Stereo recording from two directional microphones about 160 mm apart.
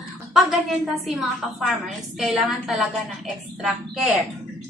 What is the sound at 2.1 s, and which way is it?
A woman's voice, centre (ahead or behind).